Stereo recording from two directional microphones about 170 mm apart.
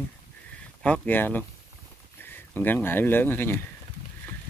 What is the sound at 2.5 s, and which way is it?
Speech, 10° left (ahead or behind).